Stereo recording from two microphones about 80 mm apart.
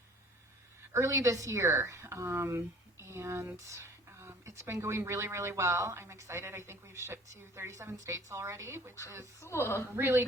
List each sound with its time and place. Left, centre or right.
0.9 s speech: right
9.4 s a woman's voice: left
9.9 s speech: right